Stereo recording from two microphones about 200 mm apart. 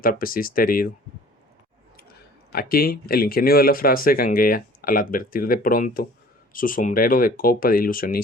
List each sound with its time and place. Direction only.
0.0 s speech: 45° left (ahead or behind)
2.0 s speech: 50° left (ahead or behind)